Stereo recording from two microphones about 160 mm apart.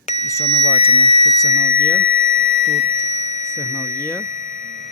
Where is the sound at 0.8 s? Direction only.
40° left (ahead or behind).